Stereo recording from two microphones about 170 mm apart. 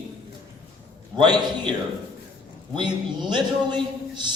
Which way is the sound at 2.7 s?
25° right (ahead or behind).